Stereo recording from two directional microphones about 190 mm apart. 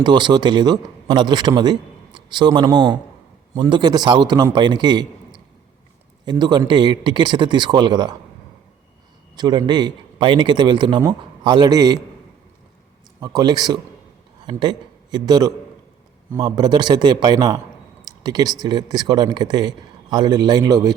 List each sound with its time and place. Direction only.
0.0 s a man's voice: 25° right (ahead or behind)
6.2 s a man's voice: 20° right (ahead or behind)
9.3 s a man's voice: 20° right (ahead or behind)
13.1 s a man's voice: 20° right (ahead or behind)